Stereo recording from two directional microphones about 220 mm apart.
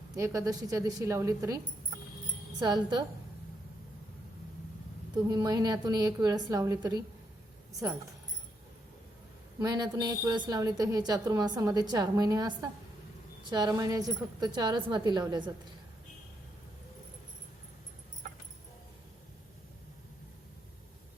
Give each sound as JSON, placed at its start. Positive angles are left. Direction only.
{"t": 0.2, "sound": "a woman's voice", "side_deg": -15}
{"t": 5.1, "sound": "a woman's voice", "side_deg": -20}
{"t": 9.6, "sound": "a woman's voice", "side_deg": -15}